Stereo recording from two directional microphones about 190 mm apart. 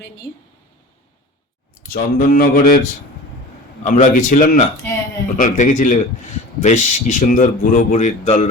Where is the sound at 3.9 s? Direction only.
45° left (ahead or behind).